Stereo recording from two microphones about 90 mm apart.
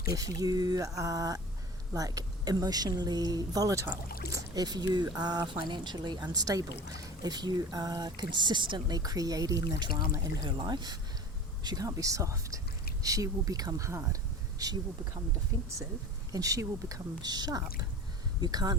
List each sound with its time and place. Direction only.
0.0 s speech: 40° right (ahead or behind); by 9.0 s 60° right (ahead or behind)
9.0 s speech: 45° right (ahead or behind)
9.6 s speech: 55° right (ahead or behind)
11.6 s speech: 45° right (ahead or behind)